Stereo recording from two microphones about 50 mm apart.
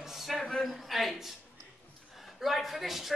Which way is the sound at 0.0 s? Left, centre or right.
Centre.